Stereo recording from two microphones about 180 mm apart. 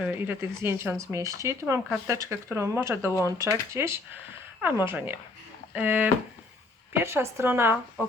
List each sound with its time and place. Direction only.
0.0 s speech: 10° right (ahead or behind)